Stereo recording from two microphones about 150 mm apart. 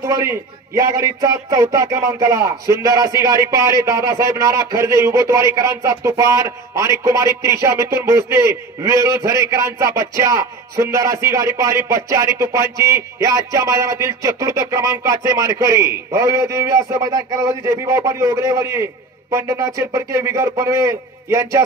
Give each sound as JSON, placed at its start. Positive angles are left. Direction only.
{"t": 0.0, "sound": "speech", "side_deg": -20}